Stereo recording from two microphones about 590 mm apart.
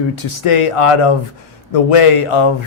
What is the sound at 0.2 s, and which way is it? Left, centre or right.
A man's voice, left.